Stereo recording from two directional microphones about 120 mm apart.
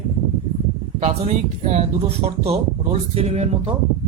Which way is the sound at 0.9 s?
60° right (ahead or behind).